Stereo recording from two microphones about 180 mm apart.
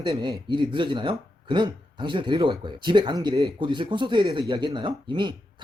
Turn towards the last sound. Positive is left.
turn(degrees=-25)  # may be behind; listen again after turning